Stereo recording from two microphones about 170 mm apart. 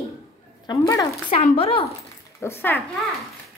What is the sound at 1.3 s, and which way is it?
Speech, 35° left (ahead or behind).